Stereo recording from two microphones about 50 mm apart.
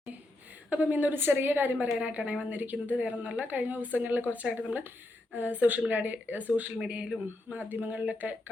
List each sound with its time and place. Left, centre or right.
0.7 s a woman's voice: right
2.0 s a woman's voice: right
6.8 s a man's voice: centre
7.7 s speech: right